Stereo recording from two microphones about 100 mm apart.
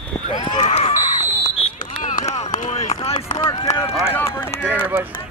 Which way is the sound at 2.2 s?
90° left.